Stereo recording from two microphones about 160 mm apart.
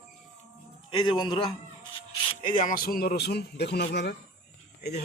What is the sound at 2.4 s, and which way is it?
Speech, 55° left (ahead or behind).